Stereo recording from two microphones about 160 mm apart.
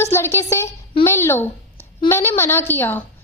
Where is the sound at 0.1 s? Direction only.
15° left (ahead or behind).